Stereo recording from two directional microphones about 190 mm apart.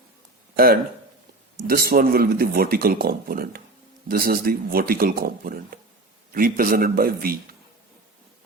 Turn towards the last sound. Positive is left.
turn(degrees=-50)  # may be behind; listen again after turning